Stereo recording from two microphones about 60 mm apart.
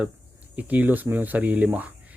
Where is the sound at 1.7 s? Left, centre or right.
Right.